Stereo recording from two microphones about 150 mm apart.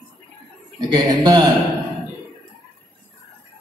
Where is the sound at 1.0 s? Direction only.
25° right (ahead or behind).